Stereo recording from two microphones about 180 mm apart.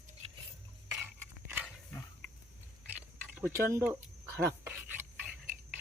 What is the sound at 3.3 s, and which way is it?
Speech, 10° right (ahead or behind).